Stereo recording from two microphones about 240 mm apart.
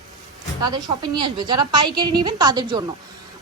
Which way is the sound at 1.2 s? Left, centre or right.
Centre.